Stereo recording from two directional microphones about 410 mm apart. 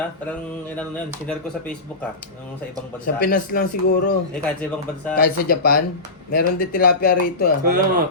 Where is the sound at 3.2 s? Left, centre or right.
Left.